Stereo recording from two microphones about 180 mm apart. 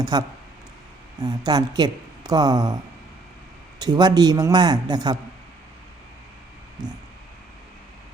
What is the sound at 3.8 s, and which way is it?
A man's voice, 20° right (ahead or behind).